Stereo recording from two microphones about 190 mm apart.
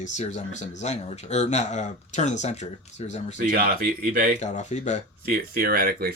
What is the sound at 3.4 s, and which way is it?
Speech, 45° right (ahead or behind).